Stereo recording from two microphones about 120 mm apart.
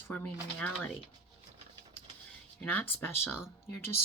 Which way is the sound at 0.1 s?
15° left (ahead or behind).